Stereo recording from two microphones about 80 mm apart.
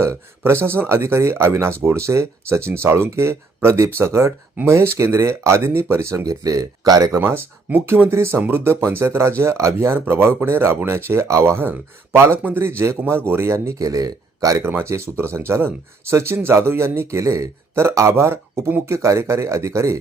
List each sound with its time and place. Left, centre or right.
0.4 s speech: right
7.2 s speech: right
8.1 s speech: right
14.6 s speech: right